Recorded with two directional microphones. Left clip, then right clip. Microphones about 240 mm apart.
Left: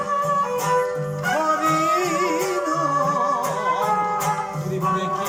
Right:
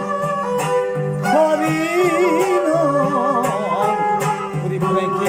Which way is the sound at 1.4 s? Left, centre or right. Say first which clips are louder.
Right 1 dB; right.